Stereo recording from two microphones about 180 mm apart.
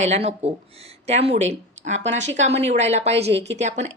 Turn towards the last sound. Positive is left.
turn(degrees=-40)  # may be behind; listen again after turning